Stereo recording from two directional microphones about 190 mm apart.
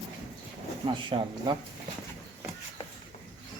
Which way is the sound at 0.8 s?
20° right (ahead or behind).